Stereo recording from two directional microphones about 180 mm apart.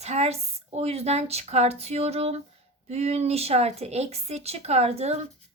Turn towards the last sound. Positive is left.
turn(degrees=-35)  # may be behind; listen again after turning